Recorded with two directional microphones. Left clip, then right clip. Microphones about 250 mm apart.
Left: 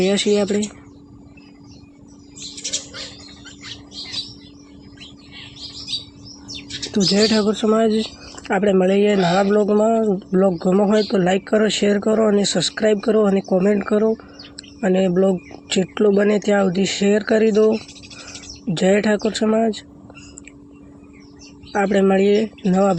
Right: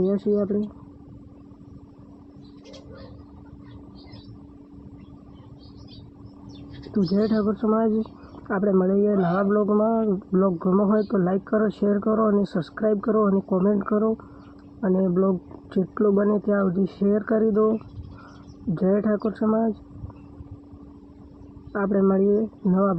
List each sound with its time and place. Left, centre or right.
0.0 s speech: left
6.9 s speech: left
21.7 s speech: left